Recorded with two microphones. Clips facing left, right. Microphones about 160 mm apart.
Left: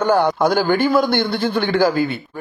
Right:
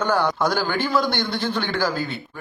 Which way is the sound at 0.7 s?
50° left (ahead or behind).